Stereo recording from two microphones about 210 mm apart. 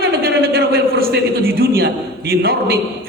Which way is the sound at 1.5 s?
45° right (ahead or behind).